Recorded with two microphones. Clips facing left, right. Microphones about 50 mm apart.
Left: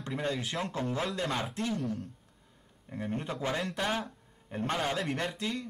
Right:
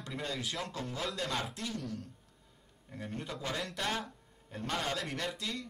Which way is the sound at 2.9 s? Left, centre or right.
Left.